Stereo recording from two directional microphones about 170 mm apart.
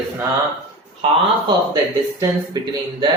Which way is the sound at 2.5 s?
20° right (ahead or behind).